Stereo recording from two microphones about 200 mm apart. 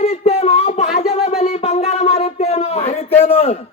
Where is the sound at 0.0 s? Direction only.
30° left (ahead or behind).